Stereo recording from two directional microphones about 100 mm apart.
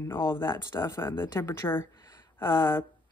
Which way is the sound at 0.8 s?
25° left (ahead or behind).